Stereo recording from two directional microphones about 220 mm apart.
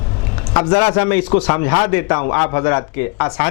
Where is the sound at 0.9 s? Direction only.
10° left (ahead or behind).